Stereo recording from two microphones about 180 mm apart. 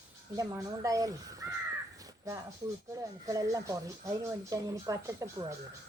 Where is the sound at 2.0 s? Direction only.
15° right (ahead or behind).